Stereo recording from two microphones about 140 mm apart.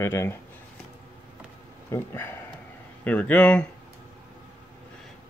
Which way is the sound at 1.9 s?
20° left (ahead or behind).